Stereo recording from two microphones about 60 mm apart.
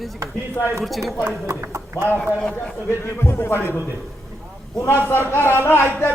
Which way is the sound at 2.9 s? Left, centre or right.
Left.